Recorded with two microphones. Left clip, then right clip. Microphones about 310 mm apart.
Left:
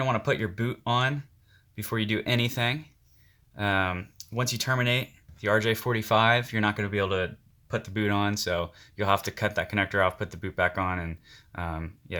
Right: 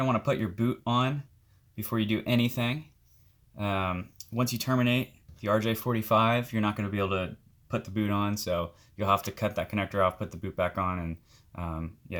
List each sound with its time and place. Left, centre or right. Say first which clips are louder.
0.0 s speech: left 1 dB; left